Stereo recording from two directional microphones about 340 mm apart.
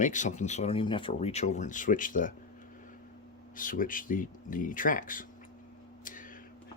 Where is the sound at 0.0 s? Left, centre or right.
Left.